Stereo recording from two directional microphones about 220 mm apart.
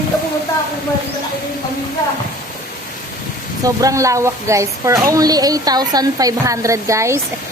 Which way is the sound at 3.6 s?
15° right (ahead or behind).